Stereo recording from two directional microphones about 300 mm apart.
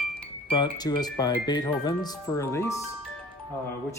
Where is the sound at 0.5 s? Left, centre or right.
Centre.